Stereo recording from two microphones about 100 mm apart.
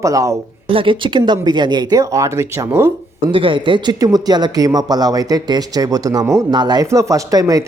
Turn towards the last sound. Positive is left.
turn(degrees=-35)  # may be behind; listen again after turning